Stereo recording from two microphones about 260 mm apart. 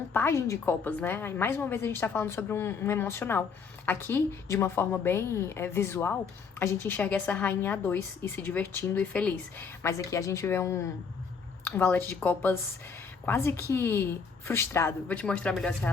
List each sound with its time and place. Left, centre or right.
0.1 s a woman's voice: centre